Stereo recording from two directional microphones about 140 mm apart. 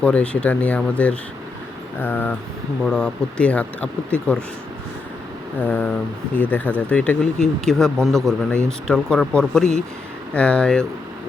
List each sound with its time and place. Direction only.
0.0 s speech: 10° left (ahead or behind)
5.5 s speech: 10° left (ahead or behind)